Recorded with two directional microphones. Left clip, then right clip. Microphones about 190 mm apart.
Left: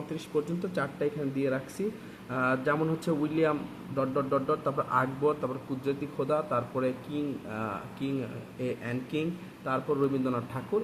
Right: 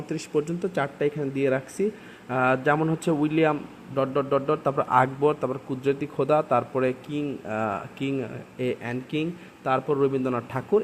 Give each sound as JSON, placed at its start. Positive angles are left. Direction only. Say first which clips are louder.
{"t": 0.3, "sound": "a man's voice", "louder": "right 5 dB", "side_deg": -40}